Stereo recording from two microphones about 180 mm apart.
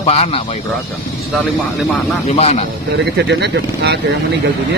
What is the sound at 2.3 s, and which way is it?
Speech, 35° left (ahead or behind).